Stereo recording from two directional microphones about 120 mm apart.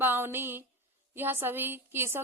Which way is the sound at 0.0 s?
15° right (ahead or behind).